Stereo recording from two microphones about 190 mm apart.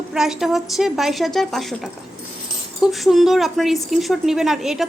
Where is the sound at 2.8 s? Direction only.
Centre (ahead or behind).